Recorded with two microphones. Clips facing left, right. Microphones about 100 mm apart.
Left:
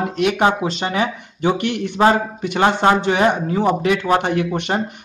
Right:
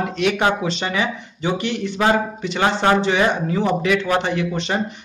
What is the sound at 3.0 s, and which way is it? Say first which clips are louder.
Speech: left 1 dB; 45° left (ahead or behind).